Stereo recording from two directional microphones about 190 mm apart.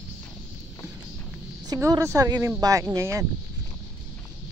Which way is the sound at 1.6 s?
20° right (ahead or behind).